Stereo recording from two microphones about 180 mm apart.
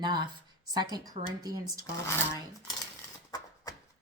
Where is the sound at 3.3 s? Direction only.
20° left (ahead or behind).